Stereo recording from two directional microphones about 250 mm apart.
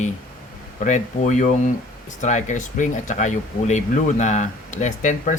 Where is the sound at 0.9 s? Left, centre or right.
Left.